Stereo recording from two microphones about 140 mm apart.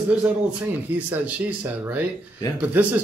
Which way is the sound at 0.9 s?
10° right (ahead or behind).